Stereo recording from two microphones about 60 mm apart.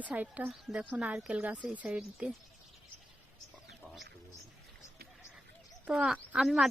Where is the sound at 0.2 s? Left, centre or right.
Right.